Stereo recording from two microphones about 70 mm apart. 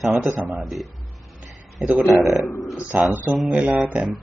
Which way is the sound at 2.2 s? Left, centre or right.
Centre.